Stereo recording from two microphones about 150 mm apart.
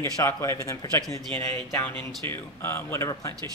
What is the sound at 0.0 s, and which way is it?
Speech, 20° left (ahead or behind).